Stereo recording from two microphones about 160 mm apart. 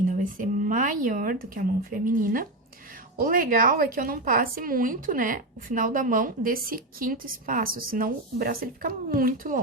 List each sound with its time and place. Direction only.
0.1 s a woman's voice: 55° right (ahead or behind)